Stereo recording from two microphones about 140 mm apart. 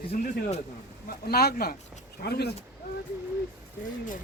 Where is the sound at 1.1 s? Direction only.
90° left.